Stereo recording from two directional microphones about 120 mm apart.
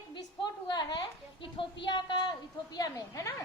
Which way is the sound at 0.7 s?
35° left (ahead or behind).